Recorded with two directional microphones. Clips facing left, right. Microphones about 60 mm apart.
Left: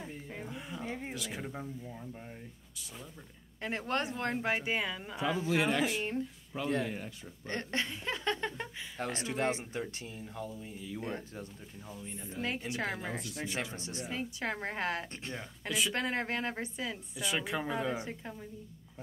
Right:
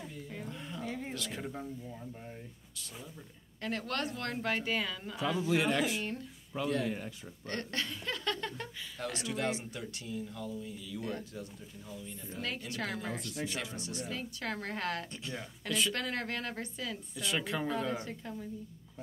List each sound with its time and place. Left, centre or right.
0.5 s a sound: centre
1.1 s a woman's voice: centre
3.6 s speech: left
7.4 s speech: left
13.2 s a woman's voice: centre
13.7 s a woman's voice: left
17.2 s a woman's voice: centre